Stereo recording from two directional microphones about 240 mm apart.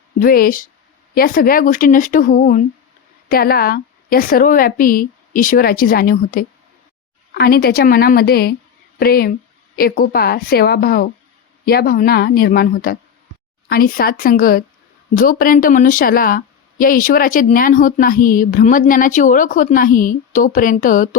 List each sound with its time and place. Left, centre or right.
0.2 s speech: left